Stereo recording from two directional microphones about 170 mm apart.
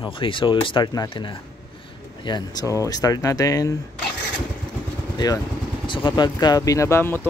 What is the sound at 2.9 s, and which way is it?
Speech, 20° left (ahead or behind).